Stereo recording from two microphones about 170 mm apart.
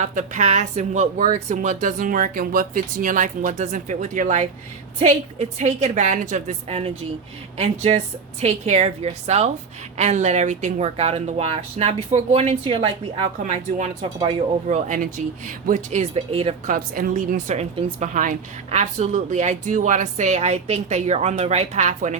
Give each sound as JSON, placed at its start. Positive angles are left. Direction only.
{"t": 0.0, "sound": "a woman's voice", "side_deg": -45}
{"t": 14.8, "sound": "a woman's voice", "side_deg": -50}
{"t": 16.7, "sound": "a woman's voice", "side_deg": -55}